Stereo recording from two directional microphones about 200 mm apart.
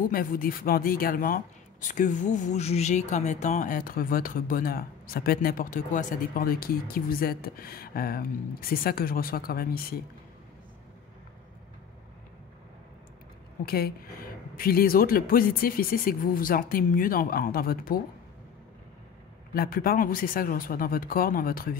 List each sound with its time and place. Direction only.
0.1 s speech: 45° left (ahead or behind)
13.7 s speech: 50° left (ahead or behind)
19.5 s speech: 50° left (ahead or behind)